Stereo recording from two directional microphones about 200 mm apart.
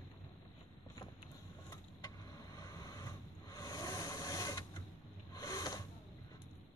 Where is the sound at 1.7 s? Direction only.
15° left (ahead or behind).